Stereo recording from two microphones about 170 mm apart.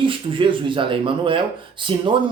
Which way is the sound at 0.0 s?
30° right (ahead or behind).